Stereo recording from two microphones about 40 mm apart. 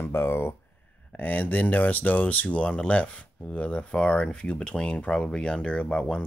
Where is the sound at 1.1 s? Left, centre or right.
Left.